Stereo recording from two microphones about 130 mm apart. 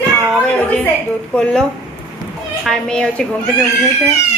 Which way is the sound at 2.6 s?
5° left (ahead or behind).